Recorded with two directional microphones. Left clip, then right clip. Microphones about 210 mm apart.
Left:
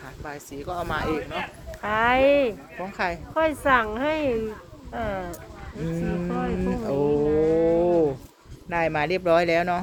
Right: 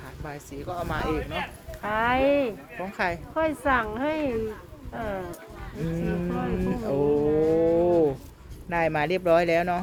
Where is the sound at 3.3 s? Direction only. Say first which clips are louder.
Left 4 dB; 35° left (ahead or behind).